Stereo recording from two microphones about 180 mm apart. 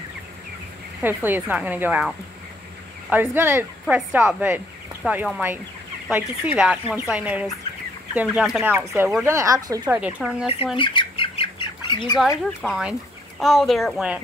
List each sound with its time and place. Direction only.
1.0 s speech: 10° right (ahead or behind)
9.8 s speech: 10° right (ahead or behind)
10.8 s squawk: 25° left (ahead or behind)
12.6 s speech: centre (ahead or behind)